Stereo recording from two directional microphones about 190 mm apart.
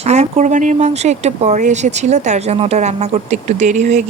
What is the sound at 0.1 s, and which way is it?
Speech, 35° right (ahead or behind).